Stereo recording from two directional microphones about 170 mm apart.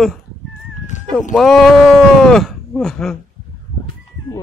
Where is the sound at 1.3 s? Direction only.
Centre (ahead or behind).